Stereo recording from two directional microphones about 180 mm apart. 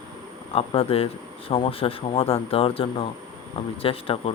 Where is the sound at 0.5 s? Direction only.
30° left (ahead or behind).